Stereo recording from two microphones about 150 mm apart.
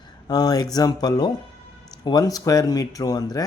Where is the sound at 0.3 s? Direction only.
25° left (ahead or behind).